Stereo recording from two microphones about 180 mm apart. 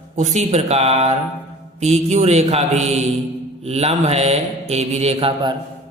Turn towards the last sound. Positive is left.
turn(degrees=-30)  # may be behind; listen again after turning